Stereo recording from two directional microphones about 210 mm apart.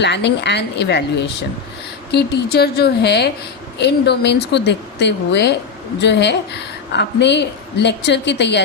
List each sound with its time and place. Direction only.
0.0 s a woman's voice: 55° left (ahead or behind)